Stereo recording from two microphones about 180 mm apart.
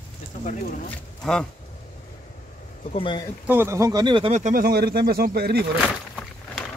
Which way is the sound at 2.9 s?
30° left (ahead or behind).